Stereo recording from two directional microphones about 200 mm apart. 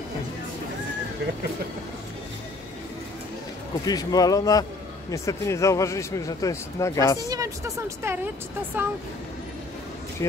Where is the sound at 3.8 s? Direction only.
20° left (ahead or behind).